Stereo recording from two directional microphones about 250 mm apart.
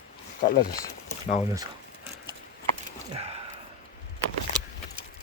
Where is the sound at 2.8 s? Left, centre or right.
Right.